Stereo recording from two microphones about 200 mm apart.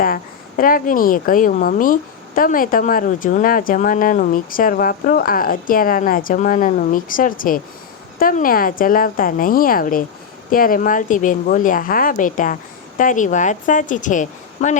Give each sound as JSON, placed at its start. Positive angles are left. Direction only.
{"t": 0.0, "sound": "a woman's voice", "side_deg": 45}